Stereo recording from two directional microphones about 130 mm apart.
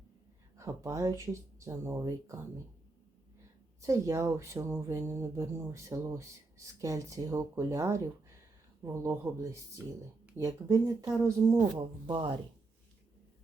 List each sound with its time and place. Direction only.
0.5 s speech: 25° right (ahead or behind)
3.8 s speech: 25° right (ahead or behind)
11.8 s speech: 45° right (ahead or behind)